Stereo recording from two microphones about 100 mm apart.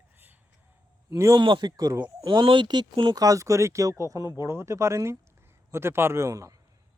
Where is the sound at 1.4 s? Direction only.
50° right (ahead or behind).